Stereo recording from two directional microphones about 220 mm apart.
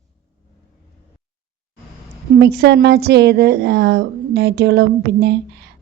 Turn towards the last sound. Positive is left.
turn(degrees=-50)  # may be behind; listen again after turning